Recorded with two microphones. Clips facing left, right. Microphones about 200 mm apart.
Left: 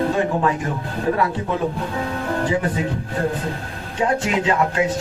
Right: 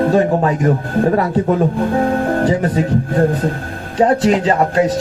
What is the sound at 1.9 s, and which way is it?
Music, 50° right (ahead or behind).